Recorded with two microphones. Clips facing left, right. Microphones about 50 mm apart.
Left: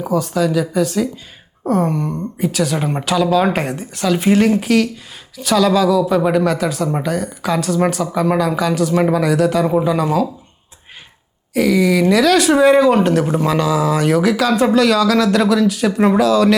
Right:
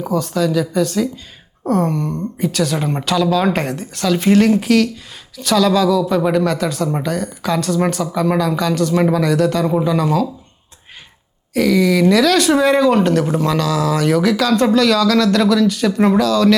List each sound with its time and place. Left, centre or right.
0.0 s speech: centre
11.5 s speech: centre
14.1 s speech: centre